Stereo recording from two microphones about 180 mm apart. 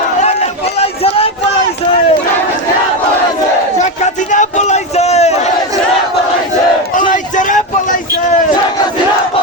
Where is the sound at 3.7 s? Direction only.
40° left (ahead or behind).